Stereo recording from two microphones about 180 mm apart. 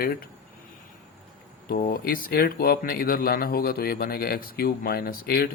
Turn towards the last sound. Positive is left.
turn(degrees=60)  # may be behind; listen again after turning